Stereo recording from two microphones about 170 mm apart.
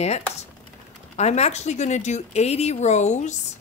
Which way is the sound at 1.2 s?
40° left (ahead or behind).